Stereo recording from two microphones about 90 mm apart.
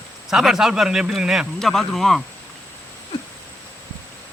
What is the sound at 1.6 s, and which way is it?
Speech, 5° left (ahead or behind).